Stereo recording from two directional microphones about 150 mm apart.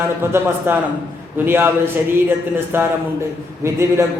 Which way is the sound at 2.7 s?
15° right (ahead or behind).